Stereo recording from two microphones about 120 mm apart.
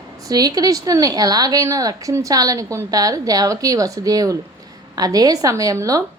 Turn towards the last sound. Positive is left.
turn(degrees=-30)  # may be behind; listen again after turning